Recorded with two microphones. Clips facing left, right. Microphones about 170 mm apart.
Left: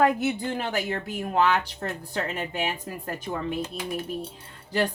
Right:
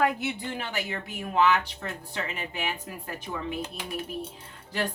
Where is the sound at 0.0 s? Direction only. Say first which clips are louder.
Left 4 dB; 45° left (ahead or behind).